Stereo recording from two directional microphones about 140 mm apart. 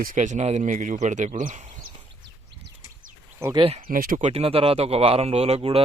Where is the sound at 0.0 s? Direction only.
70° right (ahead or behind).